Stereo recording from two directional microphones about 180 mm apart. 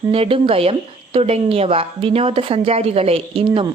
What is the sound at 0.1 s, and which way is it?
Speech, 30° right (ahead or behind).